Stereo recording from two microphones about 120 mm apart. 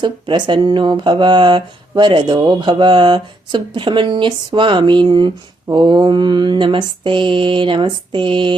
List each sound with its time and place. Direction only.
0.0 s speech: 40° right (ahead or behind)